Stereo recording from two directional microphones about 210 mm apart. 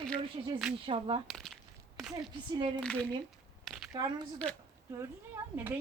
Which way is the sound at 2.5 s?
25° right (ahead or behind).